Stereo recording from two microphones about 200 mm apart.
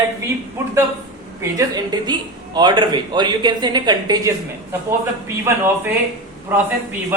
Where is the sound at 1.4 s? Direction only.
20° right (ahead or behind).